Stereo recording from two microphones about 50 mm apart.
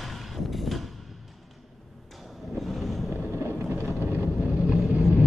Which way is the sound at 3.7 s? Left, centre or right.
Right.